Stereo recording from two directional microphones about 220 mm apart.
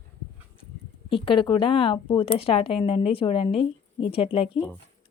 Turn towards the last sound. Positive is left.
turn(degrees=25)  # may be behind; listen again after turning